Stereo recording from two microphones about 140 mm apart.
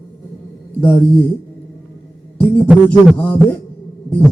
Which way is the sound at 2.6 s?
5° right (ahead or behind).